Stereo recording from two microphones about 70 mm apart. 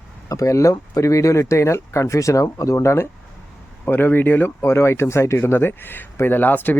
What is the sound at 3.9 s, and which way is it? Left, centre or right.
Speech, left.